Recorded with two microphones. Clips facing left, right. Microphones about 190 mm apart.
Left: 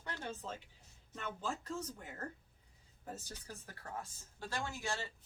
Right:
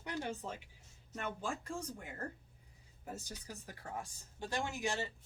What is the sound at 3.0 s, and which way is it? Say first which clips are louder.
Speech: right 1 dB; 15° right (ahead or behind).